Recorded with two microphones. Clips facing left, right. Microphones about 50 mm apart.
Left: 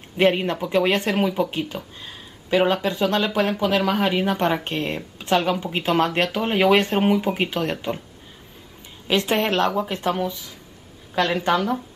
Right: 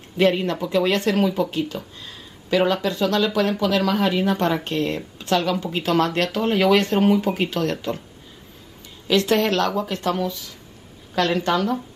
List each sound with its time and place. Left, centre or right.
0.2 s speech: left
9.0 s a woman's voice: left